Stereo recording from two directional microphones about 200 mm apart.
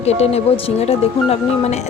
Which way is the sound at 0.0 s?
30° left (ahead or behind).